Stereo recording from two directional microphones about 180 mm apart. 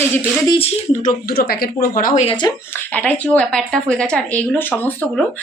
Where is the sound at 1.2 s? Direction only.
60° left (ahead or behind).